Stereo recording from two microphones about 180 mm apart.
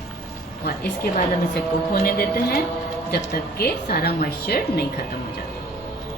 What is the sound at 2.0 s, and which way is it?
Speech, 55° left (ahead or behind).